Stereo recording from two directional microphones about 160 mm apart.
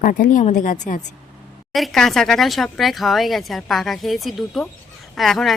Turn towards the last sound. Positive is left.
turn(degrees=0)  # may be behind; listen again after turning